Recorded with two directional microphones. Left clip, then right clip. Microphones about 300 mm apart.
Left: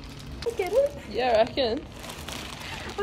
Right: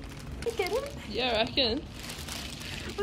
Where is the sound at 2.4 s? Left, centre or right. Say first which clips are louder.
Left 3 dB; centre.